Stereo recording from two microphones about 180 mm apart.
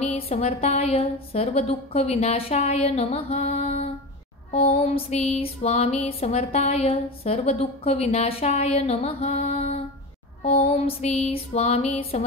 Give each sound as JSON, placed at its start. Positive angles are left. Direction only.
{"t": 0.0, "sound": "music", "side_deg": 35}